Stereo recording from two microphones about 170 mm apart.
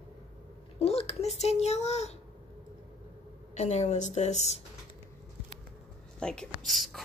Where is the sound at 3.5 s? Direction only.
40° left (ahead or behind).